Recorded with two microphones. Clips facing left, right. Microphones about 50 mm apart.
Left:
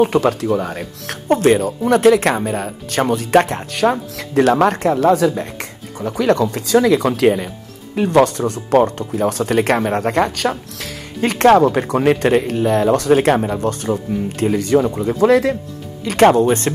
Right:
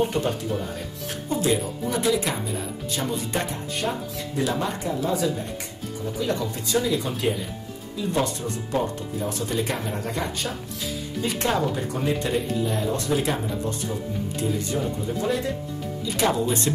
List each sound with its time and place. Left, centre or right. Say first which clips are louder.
0.0 s speech: left 9 dB; left
16.0 s speech: left 12 dB; left